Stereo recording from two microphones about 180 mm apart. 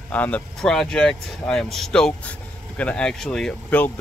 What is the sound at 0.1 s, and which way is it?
Speech, 10° left (ahead or behind).